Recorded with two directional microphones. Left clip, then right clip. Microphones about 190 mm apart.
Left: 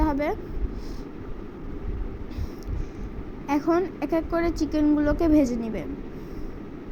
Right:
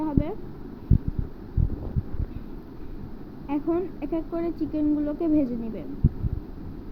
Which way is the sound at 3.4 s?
60° left (ahead or behind).